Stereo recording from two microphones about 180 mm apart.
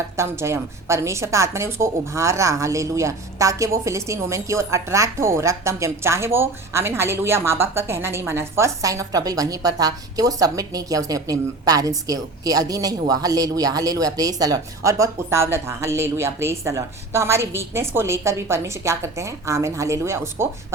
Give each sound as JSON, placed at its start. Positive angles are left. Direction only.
{"t": 0.2, "sound": "a woman's voice", "side_deg": -15}